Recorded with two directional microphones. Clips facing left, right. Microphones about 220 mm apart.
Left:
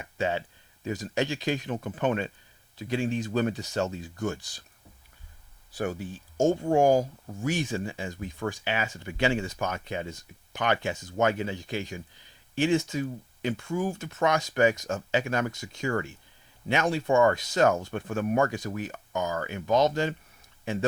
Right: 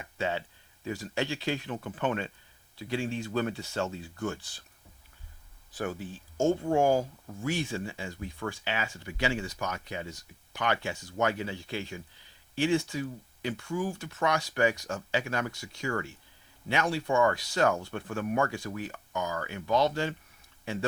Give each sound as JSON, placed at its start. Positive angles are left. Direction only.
{"t": 0.0, "sound": "a sound", "side_deg": 15}
{"t": 0.9, "sound": "speech", "side_deg": 20}
{"t": 5.7, "sound": "speech", "side_deg": 15}
{"t": 17.2, "sound": "speech", "side_deg": 20}